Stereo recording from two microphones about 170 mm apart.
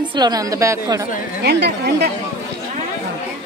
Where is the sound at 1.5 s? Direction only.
75° right (ahead or behind).